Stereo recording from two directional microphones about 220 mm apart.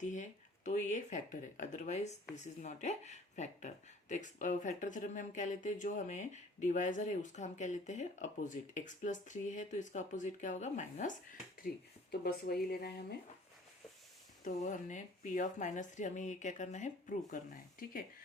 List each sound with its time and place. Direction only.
0.0 s speech: 35° left (ahead or behind)
14.4 s speech: 35° left (ahead or behind)